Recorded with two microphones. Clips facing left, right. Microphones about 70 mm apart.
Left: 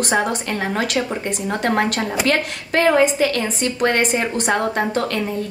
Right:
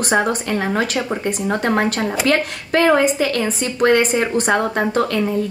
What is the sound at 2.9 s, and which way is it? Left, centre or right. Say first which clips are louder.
A woman's voice: even; right.